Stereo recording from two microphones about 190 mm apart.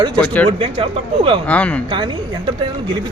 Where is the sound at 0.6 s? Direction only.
30° right (ahead or behind).